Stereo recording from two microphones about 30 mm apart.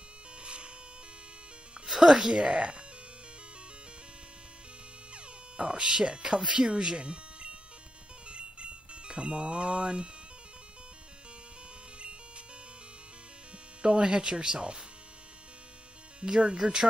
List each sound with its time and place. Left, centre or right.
0.4 s a sound: right
2.0 s speech: right
5.1 s speech: right
8.3 s music: right
13.8 s speech: right
16.3 s speech: right